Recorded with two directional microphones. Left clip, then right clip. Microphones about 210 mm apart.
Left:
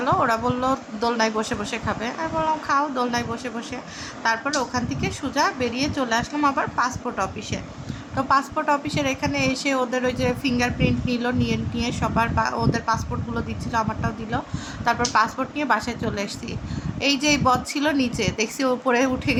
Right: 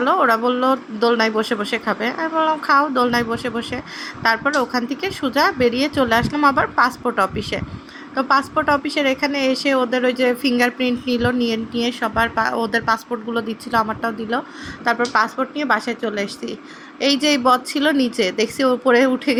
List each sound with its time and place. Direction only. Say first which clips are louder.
0.0 s a woman's voice: right 5 dB; 15° right (ahead or behind)
14.8 s a woman's voice: right 3 dB; 10° right (ahead or behind)